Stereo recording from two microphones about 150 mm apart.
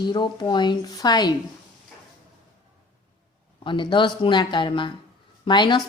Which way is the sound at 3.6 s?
35° left (ahead or behind).